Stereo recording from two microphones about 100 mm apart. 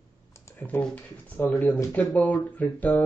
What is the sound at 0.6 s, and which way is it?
Speech, 15° left (ahead or behind).